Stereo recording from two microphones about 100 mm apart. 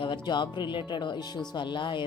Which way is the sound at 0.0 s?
50° left (ahead or behind).